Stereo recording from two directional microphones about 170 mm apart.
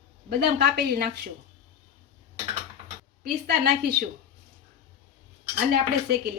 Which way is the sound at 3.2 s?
70° right (ahead or behind).